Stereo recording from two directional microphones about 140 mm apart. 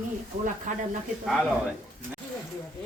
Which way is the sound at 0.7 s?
65° right (ahead or behind).